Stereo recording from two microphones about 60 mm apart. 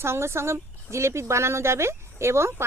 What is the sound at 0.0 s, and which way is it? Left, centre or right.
Speech, right.